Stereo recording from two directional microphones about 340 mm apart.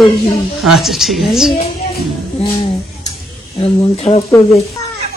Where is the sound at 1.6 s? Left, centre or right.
Centre.